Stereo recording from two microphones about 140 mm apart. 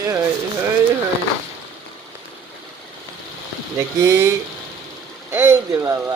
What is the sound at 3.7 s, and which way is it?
Speech, 20° right (ahead or behind).